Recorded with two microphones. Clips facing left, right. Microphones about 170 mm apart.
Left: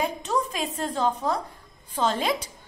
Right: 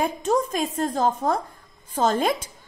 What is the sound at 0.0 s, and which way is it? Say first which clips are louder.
A woman's voice: right 4 dB; 45° right (ahead or behind).